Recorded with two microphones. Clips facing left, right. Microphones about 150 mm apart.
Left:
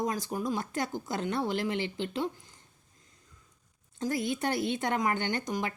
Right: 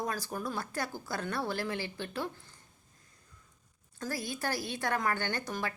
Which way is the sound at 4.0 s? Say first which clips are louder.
Left 6 dB; 20° left (ahead or behind).